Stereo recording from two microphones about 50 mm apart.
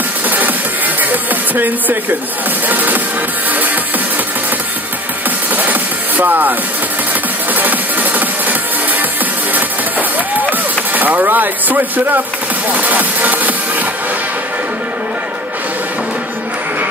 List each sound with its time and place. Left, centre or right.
0.3 s music: right
1.1 s a sound: right
2.7 s speech: right
5.6 s music: right
7.5 s music: right
11.0 s speech: right